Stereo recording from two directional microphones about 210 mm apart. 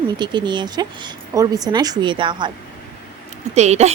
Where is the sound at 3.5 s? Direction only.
30° right (ahead or behind).